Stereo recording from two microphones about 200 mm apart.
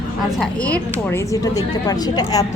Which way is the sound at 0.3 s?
5° left (ahead or behind).